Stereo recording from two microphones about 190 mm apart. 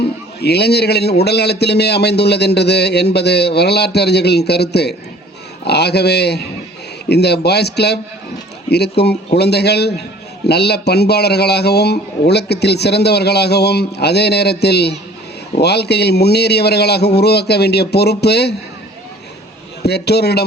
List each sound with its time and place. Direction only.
0.3 s a man's voice: 60° left (ahead or behind)
19.8 s a man's voice: 60° left (ahead or behind)